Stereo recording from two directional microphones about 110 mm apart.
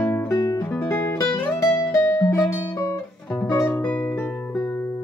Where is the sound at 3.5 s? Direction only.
25° left (ahead or behind).